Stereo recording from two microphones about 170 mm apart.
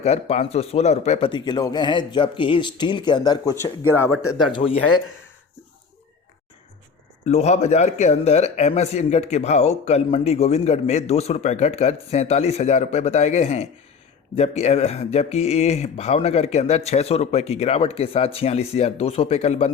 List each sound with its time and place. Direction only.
0.0 s speech: 40° left (ahead or behind)
4.5 s speech: 30° left (ahead or behind)
7.3 s a man's voice: 40° left (ahead or behind)